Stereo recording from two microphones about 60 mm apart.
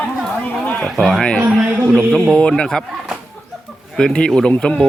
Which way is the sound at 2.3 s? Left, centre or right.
Centre.